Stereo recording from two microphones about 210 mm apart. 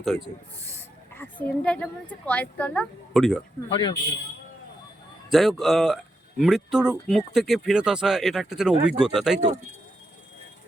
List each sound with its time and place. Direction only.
0.6 s speech: 10° left (ahead or behind)
3.7 s speech: 20° left (ahead or behind)
5.3 s speech: centre (ahead or behind)